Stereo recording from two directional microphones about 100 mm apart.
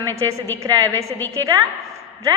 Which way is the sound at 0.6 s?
30° right (ahead or behind).